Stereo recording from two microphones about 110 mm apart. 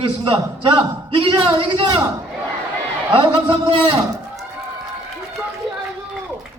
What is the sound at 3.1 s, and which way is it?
Speech, 55° right (ahead or behind).